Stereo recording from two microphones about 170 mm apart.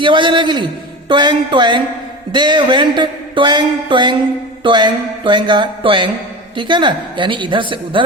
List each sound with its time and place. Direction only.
0.0 s speech: 30° right (ahead or behind)